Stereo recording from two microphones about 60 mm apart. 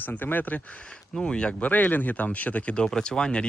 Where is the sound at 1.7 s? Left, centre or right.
Left.